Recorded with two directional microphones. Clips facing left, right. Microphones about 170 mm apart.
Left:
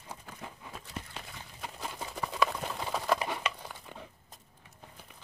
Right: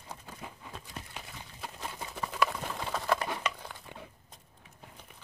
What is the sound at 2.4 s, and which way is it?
Patter, 5° left (ahead or behind).